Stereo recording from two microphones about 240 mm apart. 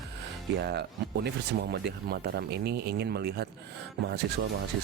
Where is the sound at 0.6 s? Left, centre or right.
Right.